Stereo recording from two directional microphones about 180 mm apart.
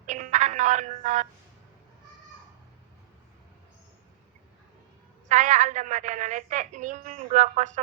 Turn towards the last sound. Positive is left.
turn(degrees=-40)  # may be behind; listen again after turning